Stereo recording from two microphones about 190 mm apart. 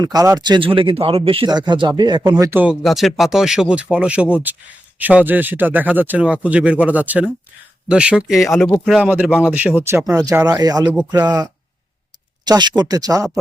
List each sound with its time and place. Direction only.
0.0 s speech: 20° right (ahead or behind)
2.8 s speech: centre (ahead or behind)
9.0 s speech: 10° right (ahead or behind)
10.8 s speech: 10° right (ahead or behind)
12.5 s speech: 20° right (ahead or behind)